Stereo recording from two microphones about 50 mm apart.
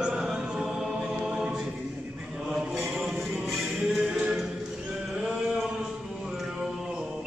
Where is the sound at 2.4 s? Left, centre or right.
Centre.